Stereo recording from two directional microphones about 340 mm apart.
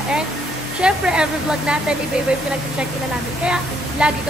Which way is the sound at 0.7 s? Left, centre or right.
Centre.